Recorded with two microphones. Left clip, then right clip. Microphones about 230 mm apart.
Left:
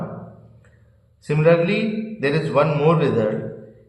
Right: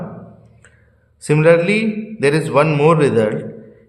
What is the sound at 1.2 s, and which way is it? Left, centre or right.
A man's voice, right.